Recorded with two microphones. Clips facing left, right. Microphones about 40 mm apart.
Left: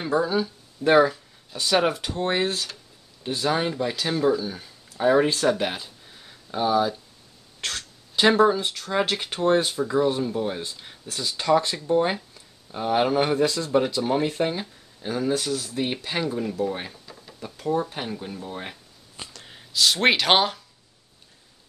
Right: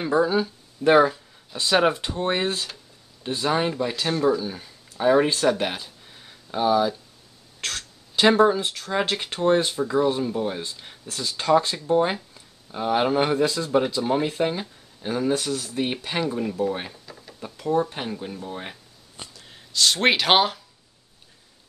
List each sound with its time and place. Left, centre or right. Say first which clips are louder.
0.0 s speech: right 2 dB; centre
4.1 s speech: even; centre
4.9 s speech: right 1 dB; centre
5.3 s speech: right 1 dB; right
5.6 s a sound: even; centre
7.6 s speech: even; centre
15.0 s speech: right 1 dB; centre